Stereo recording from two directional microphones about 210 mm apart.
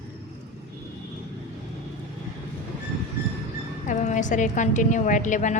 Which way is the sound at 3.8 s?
35° left (ahead or behind).